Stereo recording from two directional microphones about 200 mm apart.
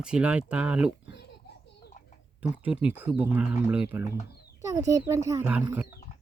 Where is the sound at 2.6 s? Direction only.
5° right (ahead or behind).